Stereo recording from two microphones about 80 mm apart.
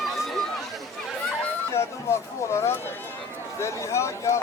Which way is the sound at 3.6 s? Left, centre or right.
Left.